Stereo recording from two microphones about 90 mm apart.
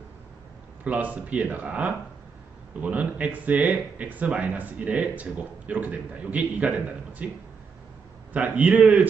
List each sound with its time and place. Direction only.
0.9 s speech: 15° right (ahead or behind)
8.3 s speech: 15° right (ahead or behind)